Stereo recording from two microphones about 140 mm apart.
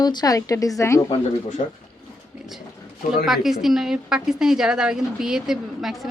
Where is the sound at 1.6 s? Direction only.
55° left (ahead or behind).